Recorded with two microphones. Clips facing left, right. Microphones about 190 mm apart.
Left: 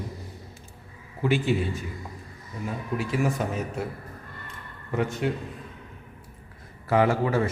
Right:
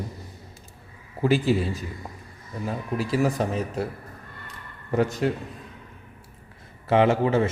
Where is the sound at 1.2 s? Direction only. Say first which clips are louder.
Right 3 dB; 35° right (ahead or behind).